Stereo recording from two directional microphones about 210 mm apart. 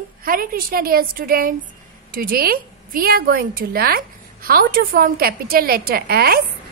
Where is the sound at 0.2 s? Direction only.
45° right (ahead or behind).